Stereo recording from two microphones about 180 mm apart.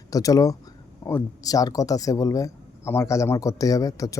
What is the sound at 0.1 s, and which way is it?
Speech, 20° left (ahead or behind).